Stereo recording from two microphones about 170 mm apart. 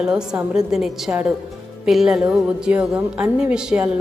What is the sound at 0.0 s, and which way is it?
A woman's voice, 5° right (ahead or behind).